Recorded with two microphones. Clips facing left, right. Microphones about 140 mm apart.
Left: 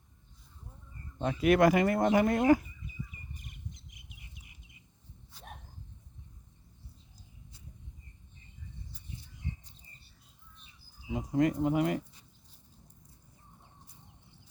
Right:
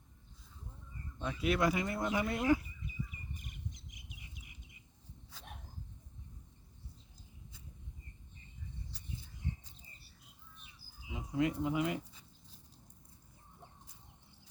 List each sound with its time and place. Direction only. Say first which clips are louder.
1.2 s speech: left 8 dB; 60° left (ahead or behind)
5.3 s a sound: left 3 dB; 90° right
11.1 s speech: left 6 dB; 45° left (ahead or behind)